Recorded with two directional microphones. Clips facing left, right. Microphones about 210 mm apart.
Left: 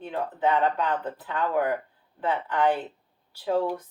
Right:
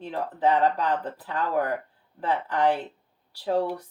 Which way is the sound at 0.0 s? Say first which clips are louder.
Right 1 dB; 35° right (ahead or behind).